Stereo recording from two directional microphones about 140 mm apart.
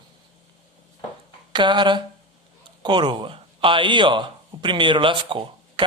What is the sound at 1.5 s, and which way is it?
A man's voice, 35° right (ahead or behind).